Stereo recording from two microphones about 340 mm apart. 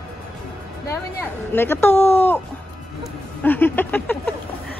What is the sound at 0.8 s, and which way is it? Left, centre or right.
Speech, centre.